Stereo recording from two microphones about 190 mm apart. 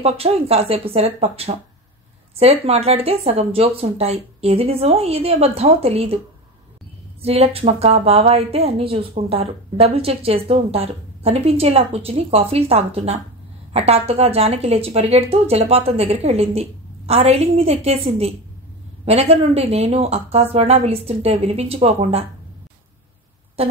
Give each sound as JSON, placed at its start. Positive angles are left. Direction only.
{"t": 0.0, "sound": "speech", "side_deg": -30}
{"t": 7.2, "sound": "speech", "side_deg": -30}
{"t": 23.6, "sound": "a sound", "side_deg": -30}